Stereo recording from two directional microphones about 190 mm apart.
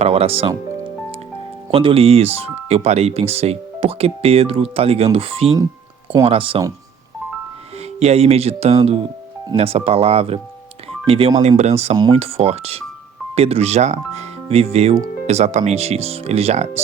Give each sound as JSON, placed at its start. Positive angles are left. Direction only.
{"t": 0.0, "sound": "speech", "side_deg": -30}
{"t": 1.7, "sound": "speech", "side_deg": -30}
{"t": 7.9, "sound": "speech", "side_deg": -35}
{"t": 11.4, "sound": "speech", "side_deg": -35}